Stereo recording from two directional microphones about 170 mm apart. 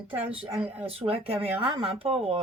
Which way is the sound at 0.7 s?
35° right (ahead or behind).